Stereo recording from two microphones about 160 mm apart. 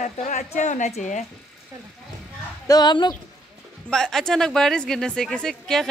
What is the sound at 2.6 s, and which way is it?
Speech, 25° left (ahead or behind).